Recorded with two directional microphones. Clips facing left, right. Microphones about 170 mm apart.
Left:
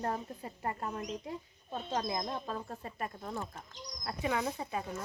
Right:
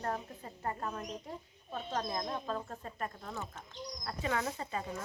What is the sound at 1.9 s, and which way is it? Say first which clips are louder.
Speech: left 1 dB; 10° left (ahead or behind).